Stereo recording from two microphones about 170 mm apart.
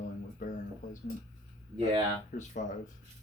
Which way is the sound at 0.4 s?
50° left (ahead or behind).